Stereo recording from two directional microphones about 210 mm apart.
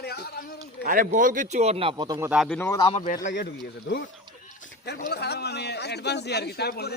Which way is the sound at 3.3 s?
50° left (ahead or behind).